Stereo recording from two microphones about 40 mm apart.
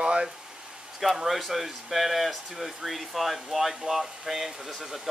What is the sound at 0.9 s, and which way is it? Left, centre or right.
Speech, centre.